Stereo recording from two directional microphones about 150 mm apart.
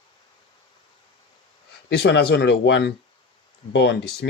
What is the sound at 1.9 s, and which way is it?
Speech, 90° left.